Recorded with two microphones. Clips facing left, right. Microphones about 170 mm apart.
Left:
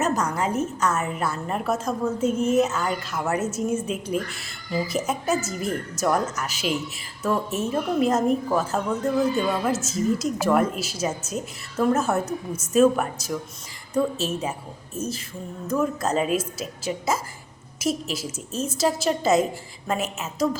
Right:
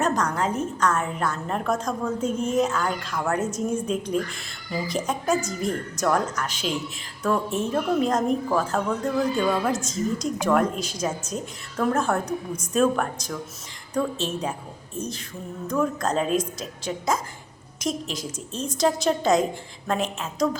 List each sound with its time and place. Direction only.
0.0 s a woman's voice: 10° left (ahead or behind)